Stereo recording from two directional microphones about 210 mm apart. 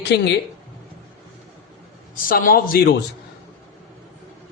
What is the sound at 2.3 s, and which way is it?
Speech, 45° left (ahead or behind).